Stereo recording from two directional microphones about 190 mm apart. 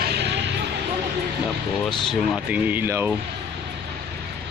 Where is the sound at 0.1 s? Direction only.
65° right (ahead or behind).